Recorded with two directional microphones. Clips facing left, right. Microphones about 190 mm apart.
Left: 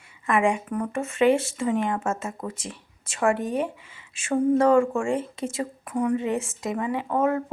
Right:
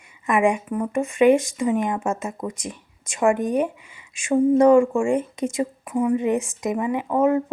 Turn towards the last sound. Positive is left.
turn(degrees=-15)  # may be behind; listen again after turning